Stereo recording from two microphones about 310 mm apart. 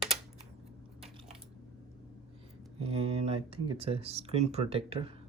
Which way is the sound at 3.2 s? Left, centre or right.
Centre.